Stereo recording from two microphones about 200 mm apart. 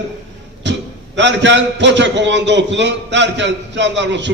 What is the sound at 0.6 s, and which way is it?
A man's voice, 60° right (ahead or behind).